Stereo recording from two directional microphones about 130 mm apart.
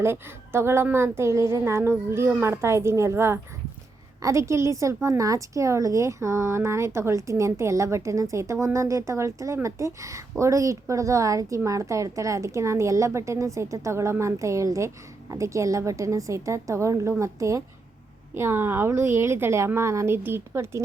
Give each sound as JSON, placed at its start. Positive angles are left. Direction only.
{"t": 0.0, "sound": "a woman's voice", "side_deg": -20}